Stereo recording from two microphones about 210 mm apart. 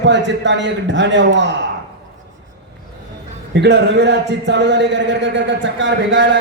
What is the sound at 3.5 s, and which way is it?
A man's voice, 55° right (ahead or behind).